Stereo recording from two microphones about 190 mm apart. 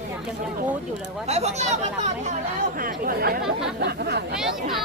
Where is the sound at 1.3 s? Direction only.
35° right (ahead or behind).